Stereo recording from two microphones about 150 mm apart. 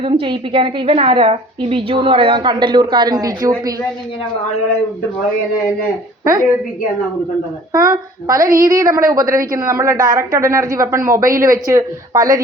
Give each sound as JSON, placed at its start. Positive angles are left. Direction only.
{"t": 0.0, "sound": "a woman's voice", "side_deg": -35}
{"t": 6.2, "sound": "a woman's voice", "side_deg": -20}
{"t": 7.9, "sound": "a woman's voice", "side_deg": -25}